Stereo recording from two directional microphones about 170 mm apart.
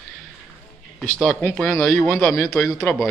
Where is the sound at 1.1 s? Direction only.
5° left (ahead or behind).